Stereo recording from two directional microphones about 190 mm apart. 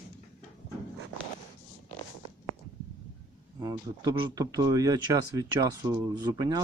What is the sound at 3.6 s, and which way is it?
Speech, 20° right (ahead or behind).